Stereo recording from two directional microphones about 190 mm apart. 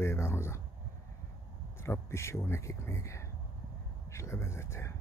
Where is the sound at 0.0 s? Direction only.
15° left (ahead or behind).